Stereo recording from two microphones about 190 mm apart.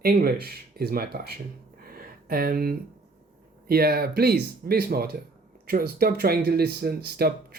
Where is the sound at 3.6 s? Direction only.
55° right (ahead or behind).